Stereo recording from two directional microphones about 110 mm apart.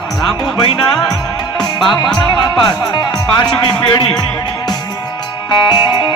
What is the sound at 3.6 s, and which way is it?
Speech, 40° left (ahead or behind).